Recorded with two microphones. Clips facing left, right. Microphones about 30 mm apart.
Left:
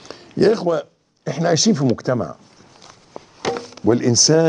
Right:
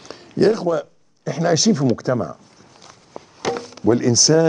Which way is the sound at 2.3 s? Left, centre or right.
Left.